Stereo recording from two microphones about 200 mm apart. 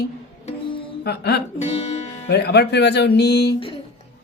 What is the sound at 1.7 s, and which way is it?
Speech, 30° left (ahead or behind).